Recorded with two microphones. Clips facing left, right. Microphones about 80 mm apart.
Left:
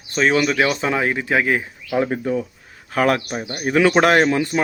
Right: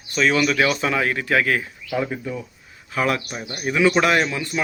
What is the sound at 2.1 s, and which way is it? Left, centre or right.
A man's voice, left.